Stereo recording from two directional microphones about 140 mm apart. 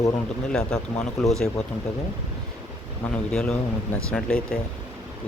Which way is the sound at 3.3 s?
5° left (ahead or behind).